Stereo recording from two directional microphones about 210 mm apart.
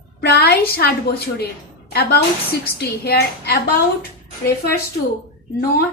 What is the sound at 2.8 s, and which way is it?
Speech, 50° left (ahead or behind).